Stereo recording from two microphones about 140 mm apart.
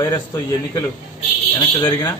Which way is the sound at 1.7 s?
30° left (ahead or behind).